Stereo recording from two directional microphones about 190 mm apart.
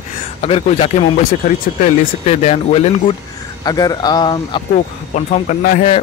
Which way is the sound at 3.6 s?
20° left (ahead or behind).